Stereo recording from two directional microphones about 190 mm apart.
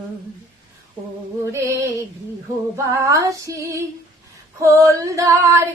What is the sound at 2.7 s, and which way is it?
Singing, 15° right (ahead or behind).